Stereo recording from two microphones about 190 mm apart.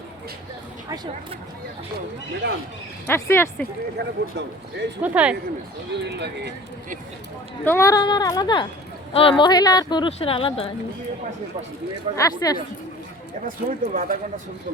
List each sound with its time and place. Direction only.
2.4 s speech: 65° right (ahead or behind)
3.1 s speech: 15° left (ahead or behind)
3.9 s speech: 65° right (ahead or behind)
5.0 s speech: 10° right (ahead or behind)
5.9 s speech: 65° right (ahead or behind)
7.6 s speech: 15° left (ahead or behind); by 10.7 s 30° left (ahead or behind)
12.1 s speech: 20° left (ahead or behind)
13.7 s speech: 45° right (ahead or behind)